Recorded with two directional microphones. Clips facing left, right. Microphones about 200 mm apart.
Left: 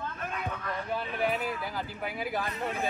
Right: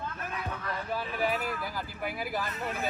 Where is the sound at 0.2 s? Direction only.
5° right (ahead or behind).